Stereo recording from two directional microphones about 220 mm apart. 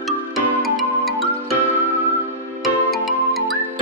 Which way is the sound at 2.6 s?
Centre (ahead or behind).